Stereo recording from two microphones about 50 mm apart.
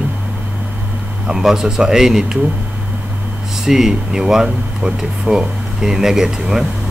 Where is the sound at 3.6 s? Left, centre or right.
Centre.